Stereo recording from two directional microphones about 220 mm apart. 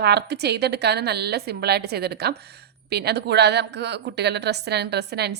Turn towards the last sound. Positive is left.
turn(degrees=-50)  # may be behind; listen again after turning